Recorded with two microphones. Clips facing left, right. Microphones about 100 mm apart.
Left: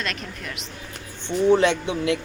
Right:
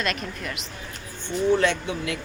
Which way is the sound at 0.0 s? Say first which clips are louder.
Right 3 dB; centre (ahead or behind).